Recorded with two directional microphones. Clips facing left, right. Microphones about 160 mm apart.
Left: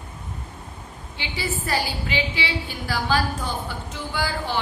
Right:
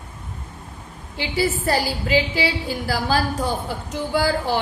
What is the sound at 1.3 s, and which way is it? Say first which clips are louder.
A woman's voice: right 5 dB; 35° right (ahead or behind).